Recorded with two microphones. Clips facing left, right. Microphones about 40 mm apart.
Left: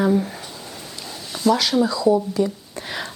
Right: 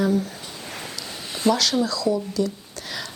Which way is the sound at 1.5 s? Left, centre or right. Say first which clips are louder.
Left 4 dB; centre.